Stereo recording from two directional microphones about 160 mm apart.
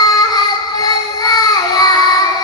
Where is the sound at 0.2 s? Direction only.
25° left (ahead or behind).